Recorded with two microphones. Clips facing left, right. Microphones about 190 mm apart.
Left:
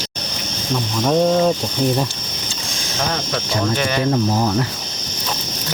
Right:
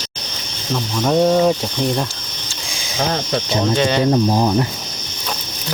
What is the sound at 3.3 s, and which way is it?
Speech, 25° right (ahead or behind).